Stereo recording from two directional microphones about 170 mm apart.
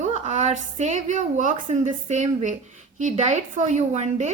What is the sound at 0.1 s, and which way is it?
A woman's voice, 45° right (ahead or behind).